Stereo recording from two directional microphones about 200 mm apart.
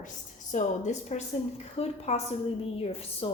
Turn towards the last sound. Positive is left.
turn(degrees=30)  # may be behind; listen again after turning